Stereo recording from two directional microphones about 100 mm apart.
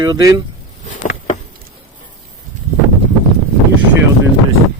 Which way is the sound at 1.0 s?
90° left.